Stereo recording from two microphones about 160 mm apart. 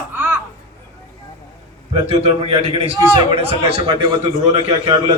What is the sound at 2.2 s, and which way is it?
A man's voice, 35° right (ahead or behind).